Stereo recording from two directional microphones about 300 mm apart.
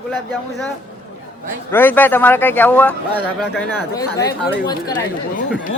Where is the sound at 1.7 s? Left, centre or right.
Centre.